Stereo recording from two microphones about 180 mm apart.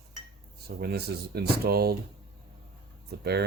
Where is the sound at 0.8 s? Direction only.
65° right (ahead or behind).